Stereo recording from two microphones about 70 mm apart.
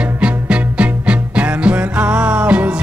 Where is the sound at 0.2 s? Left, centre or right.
Centre.